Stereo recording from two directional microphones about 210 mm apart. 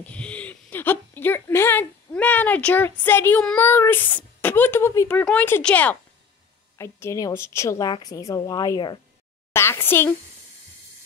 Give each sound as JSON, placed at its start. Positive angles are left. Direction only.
{"t": 0.0, "sound": "a woman's voice", "side_deg": 5}